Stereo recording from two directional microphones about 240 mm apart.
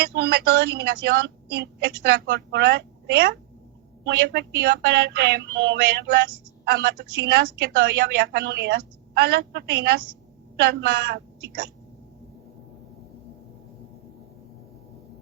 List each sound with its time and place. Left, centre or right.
0.1 s speech: right